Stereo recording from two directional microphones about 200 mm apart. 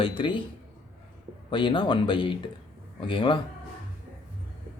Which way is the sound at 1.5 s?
25° left (ahead or behind).